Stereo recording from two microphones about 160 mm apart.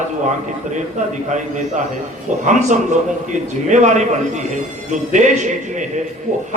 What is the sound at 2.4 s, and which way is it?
A man's voice, 50° right (ahead or behind).